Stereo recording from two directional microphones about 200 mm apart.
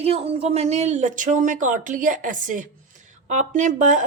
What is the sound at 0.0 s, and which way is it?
Speech, 30° right (ahead or behind).